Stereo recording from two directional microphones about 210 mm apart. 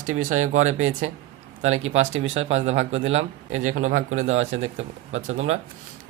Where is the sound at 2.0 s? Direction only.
65° right (ahead or behind).